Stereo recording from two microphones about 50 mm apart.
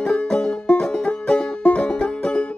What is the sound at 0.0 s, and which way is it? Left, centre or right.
Music, centre.